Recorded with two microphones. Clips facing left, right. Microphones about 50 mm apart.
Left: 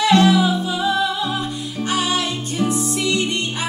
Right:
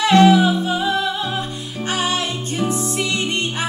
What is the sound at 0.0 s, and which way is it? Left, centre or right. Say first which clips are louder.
Music: right 2 dB; right.